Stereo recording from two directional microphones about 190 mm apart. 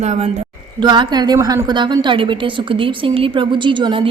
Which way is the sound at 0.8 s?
25° right (ahead or behind).